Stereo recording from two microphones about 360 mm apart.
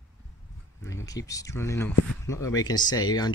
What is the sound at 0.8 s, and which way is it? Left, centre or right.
Speech, centre.